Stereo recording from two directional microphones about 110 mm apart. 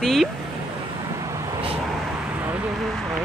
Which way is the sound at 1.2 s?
30° right (ahead or behind).